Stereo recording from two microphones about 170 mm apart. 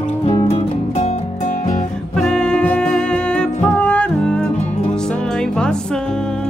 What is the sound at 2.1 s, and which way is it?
Music, 5° left (ahead or behind).